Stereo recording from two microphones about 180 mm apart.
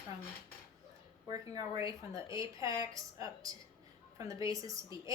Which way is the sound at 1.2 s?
20° right (ahead or behind).